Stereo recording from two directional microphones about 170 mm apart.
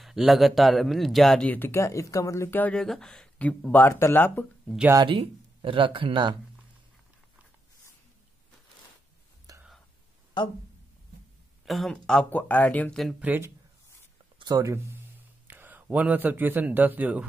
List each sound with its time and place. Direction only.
0.0 s speech: centre (ahead or behind)
5.0 s speech: 30° right (ahead or behind)
9.5 s whispering: 20° right (ahead or behind)
11.6 s speech: centre (ahead or behind)
13.2 s a man's voice: 10° right (ahead or behind)